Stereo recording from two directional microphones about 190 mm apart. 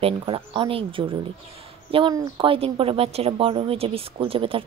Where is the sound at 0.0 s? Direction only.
25° right (ahead or behind).